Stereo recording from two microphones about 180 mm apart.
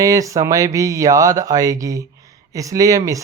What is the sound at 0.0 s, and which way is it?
Speech, 20° right (ahead or behind).